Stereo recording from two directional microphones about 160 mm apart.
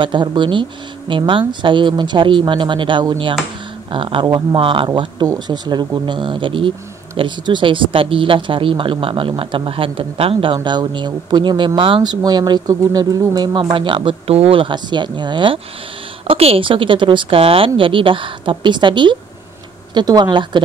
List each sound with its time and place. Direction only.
0.0 s speech: 30° right (ahead or behind)